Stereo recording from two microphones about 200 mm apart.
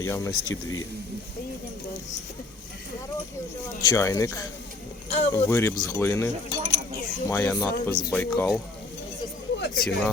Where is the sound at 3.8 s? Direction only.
15° left (ahead or behind).